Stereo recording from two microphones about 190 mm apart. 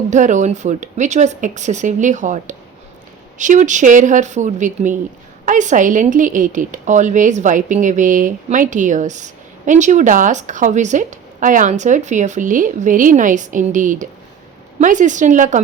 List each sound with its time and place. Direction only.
0.1 s a woman's voice: 40° right (ahead or behind)